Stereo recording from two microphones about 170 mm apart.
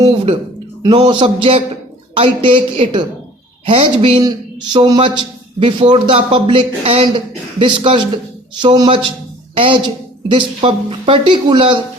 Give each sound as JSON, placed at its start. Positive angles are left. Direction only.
{"t": 0.0, "sound": "a woman's voice", "side_deg": -30}